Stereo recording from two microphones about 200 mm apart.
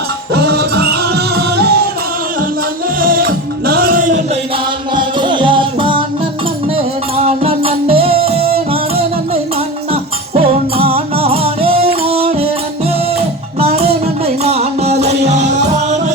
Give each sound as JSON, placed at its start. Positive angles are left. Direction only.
{"t": 0.3, "sound": "music", "side_deg": -55}
{"t": 3.0, "sound": "music", "side_deg": -45}
{"t": 4.9, "sound": "music", "side_deg": -25}
{"t": 7.3, "sound": "music", "side_deg": -30}